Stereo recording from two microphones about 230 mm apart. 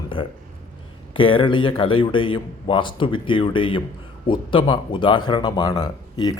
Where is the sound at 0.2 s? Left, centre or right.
Left.